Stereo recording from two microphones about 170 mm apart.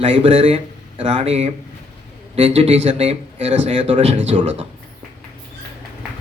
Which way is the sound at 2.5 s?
35° right (ahead or behind).